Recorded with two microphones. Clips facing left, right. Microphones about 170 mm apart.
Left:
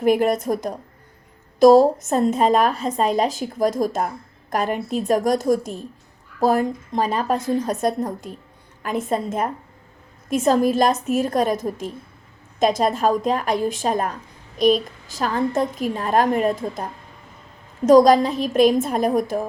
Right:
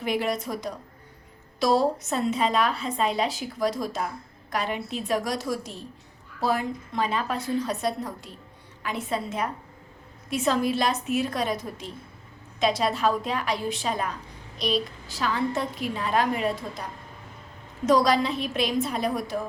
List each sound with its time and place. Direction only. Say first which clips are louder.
0.0 s a woman's voice: left 9 dB; 50° left (ahead or behind)